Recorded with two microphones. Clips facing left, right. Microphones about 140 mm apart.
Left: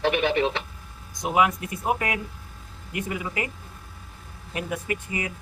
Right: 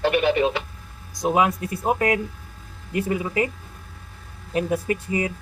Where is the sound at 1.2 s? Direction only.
35° right (ahead or behind).